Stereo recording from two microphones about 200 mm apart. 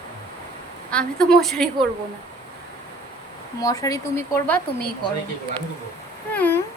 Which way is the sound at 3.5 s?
15° left (ahead or behind).